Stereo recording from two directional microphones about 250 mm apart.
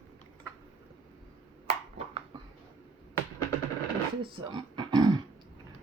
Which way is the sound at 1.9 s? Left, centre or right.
Right.